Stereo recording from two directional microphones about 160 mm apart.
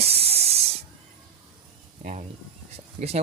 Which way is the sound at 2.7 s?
40° right (ahead or behind).